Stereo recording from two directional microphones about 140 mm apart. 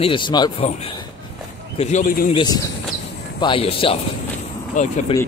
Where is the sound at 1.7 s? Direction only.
50° left (ahead or behind).